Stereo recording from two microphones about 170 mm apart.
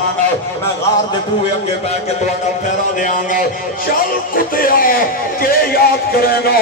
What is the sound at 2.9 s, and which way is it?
A man's voice, 50° left (ahead or behind).